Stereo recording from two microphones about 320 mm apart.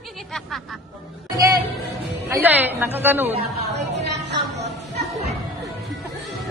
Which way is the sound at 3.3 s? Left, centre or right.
Right.